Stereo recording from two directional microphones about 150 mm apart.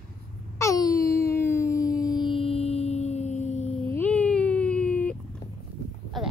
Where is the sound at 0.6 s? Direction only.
20° left (ahead or behind); by 3.7 s 50° left (ahead or behind).